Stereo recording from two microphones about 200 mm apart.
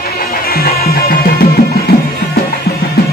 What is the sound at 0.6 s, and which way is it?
Music, 50° left (ahead or behind).